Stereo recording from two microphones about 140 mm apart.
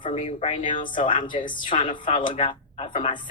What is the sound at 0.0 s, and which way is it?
A woman's voice, 40° left (ahead or behind).